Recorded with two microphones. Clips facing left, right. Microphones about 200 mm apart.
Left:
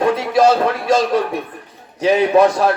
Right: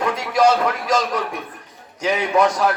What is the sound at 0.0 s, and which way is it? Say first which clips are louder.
A man's voice: left 4 dB; 30° left (ahead or behind).